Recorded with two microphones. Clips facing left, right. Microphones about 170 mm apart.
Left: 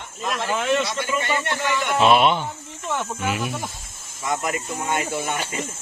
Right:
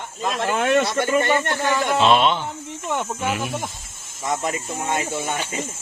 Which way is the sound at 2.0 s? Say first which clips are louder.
Left 2 dB; 10° left (ahead or behind).